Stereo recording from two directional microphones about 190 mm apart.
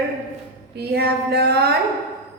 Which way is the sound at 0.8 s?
55° right (ahead or behind).